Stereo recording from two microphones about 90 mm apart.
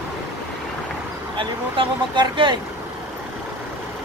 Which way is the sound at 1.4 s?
65° right (ahead or behind).